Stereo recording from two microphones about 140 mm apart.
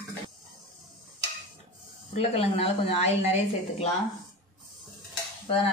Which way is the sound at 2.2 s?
45° left (ahead or behind).